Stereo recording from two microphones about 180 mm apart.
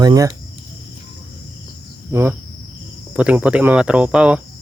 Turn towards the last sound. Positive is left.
turn(degrees=-5)  # may be behind; listen again after turning